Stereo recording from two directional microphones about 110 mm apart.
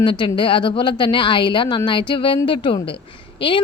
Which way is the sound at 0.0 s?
45° left (ahead or behind).